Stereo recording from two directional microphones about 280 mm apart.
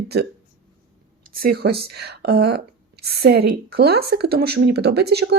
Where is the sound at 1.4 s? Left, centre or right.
Right.